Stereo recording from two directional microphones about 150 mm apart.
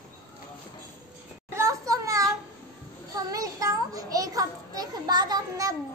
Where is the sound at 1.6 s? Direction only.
20° right (ahead or behind).